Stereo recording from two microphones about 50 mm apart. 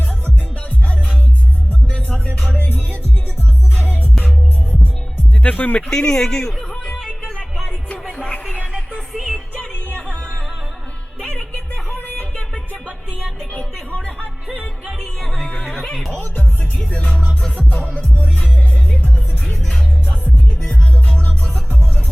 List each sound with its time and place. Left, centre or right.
1.9 s music: left
2.6 s music: left
4.7 s music: left
5.4 s music: left
5.9 s speech: centre
7.0 s music: centre
8.2 s music: left
9.1 s music: centre
11.2 s music: left
13.5 s music: left
15.2 s music: centre
15.6 s neigh: centre
16.2 s music: left
19.5 s music: centre